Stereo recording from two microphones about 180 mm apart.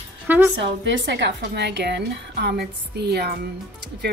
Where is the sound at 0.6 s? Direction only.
80° right.